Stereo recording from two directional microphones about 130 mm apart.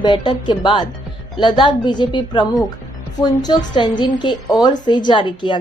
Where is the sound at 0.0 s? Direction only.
35° left (ahead or behind).